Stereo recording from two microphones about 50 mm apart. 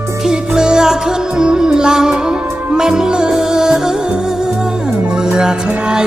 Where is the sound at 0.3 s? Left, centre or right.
Centre.